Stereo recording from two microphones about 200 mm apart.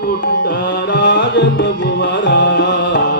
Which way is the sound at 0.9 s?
55° left (ahead or behind).